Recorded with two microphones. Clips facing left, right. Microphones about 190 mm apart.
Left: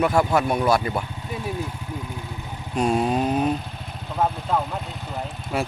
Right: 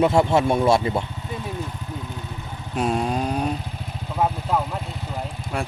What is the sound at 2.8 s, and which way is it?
Motorcycle, centre (ahead or behind).